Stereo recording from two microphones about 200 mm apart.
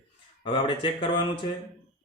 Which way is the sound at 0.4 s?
25° left (ahead or behind).